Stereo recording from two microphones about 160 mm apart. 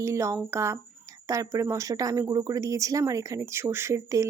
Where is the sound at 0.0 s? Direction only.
20° right (ahead or behind).